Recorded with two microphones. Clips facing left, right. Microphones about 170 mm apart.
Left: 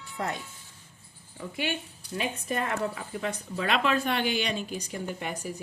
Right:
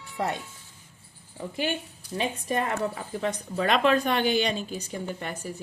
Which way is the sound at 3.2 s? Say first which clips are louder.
Right 4 dB; 45° right (ahead or behind).